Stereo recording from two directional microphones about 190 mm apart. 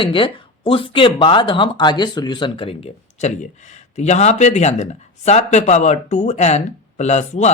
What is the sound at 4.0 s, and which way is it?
Speech, 35° left (ahead or behind).